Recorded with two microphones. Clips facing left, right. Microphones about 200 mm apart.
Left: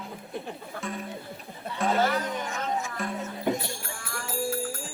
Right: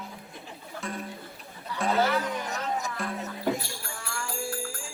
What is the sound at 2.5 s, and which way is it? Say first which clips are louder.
Music: left 1 dB; 40° right (ahead or behind).